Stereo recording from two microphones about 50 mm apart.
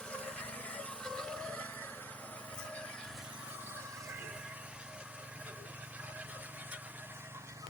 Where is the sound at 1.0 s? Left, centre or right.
Centre.